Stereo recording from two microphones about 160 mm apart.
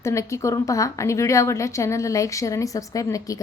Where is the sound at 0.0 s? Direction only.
20° left (ahead or behind).